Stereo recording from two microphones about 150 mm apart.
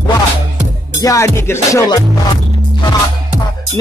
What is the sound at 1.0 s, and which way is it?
Music, 20° left (ahead or behind).